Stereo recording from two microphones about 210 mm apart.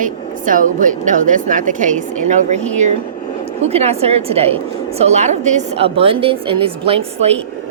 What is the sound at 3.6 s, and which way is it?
A woman's voice, 30° right (ahead or behind).